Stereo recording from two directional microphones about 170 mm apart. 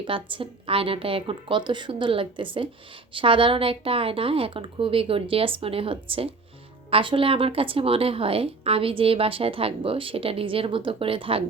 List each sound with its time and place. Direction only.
0.0 s a woman's voice: 30° right (ahead or behind)